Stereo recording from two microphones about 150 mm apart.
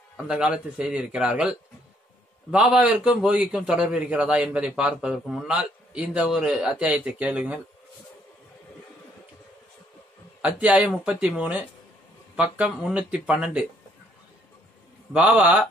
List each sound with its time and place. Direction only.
0.3 s a man's voice: 5° right (ahead or behind)
10.4 s a man's voice: 10° right (ahead or behind)
15.1 s a man's voice: 5° right (ahead or behind)